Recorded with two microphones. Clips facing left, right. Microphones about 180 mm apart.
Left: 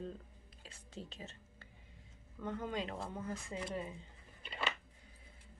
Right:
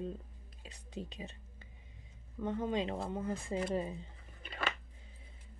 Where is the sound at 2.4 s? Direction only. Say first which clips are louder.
Right 5 dB; 20° right (ahead or behind).